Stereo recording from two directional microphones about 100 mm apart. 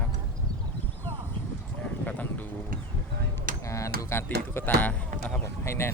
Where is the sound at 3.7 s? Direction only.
30° left (ahead or behind).